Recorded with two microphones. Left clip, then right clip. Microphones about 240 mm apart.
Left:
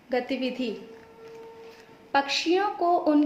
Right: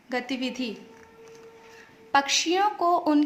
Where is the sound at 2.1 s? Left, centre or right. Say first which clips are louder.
Right 1 dB; right.